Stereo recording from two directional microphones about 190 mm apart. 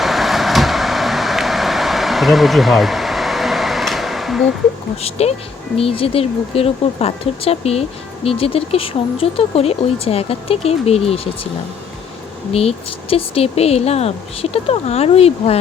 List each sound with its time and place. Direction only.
0.0 s vehicle: centre (ahead or behind)
5.0 s speech: 35° left (ahead or behind)
12.5 s speech: 30° left (ahead or behind)